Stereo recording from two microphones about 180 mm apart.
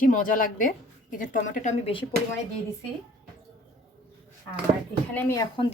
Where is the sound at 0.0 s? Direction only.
50° left (ahead or behind).